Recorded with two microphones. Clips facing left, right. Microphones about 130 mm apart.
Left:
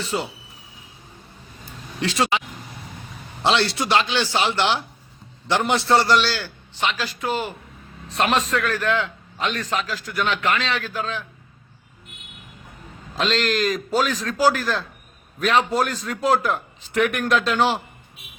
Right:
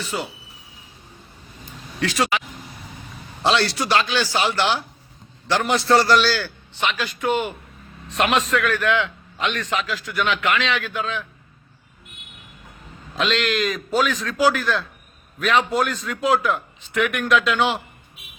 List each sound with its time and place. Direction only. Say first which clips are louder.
0.0 s a man's voice: left 2 dB; 35° left (ahead or behind)
2.0 s speech: even; 25° left (ahead or behind)
3.4 s a man's voice: even; 20° left (ahead or behind)
13.1 s a man's voice: even; 35° left (ahead or behind)